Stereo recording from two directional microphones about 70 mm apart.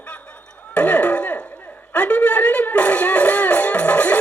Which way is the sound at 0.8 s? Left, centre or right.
Centre.